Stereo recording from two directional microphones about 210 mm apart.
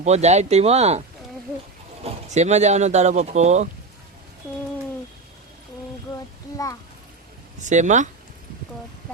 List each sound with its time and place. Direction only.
0.0 s speech: 30° right (ahead or behind)
2.0 s speech: 30° right (ahead or behind)
7.6 s speech: 35° right (ahead or behind)